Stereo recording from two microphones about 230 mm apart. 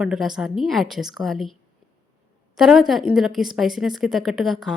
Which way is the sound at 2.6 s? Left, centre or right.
Centre.